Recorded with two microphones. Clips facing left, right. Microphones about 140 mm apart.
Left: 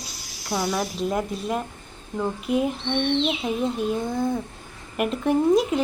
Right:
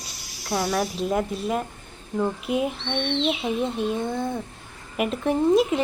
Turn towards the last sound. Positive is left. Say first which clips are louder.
# even
turn(degrees=0)  # may be behind; listen again after turning